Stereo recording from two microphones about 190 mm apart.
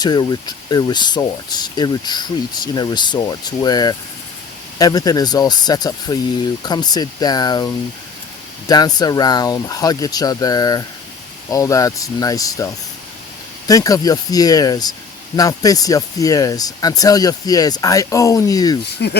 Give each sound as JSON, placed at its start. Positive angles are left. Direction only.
{"t": 0.0, "sound": "speech", "side_deg": 20}
{"t": 19.0, "sound": "speech", "side_deg": 60}